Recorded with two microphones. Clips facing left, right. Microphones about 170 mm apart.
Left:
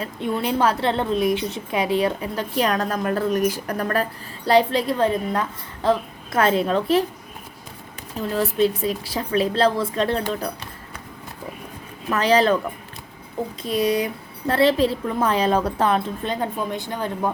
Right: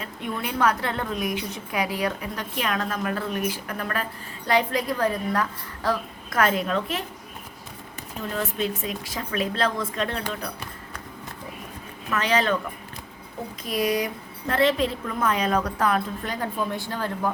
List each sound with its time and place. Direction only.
0.0 s a woman's voice: 30° left (ahead or behind)
8.3 s a woman's voice: 35° left (ahead or behind)
12.1 s a woman's voice: 35° left (ahead or behind)
13.6 s a woman's voice: 25° left (ahead or behind)